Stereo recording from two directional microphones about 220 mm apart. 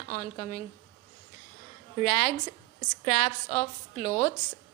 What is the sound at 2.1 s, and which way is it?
A woman's voice, 30° left (ahead or behind).